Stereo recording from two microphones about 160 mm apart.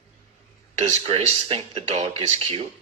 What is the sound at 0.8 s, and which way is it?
Speech, 40° right (ahead or behind).